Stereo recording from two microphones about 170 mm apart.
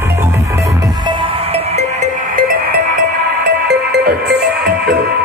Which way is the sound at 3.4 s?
75° right (ahead or behind).